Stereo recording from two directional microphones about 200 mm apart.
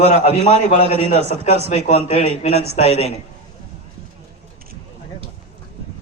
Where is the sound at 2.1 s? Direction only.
30° left (ahead or behind).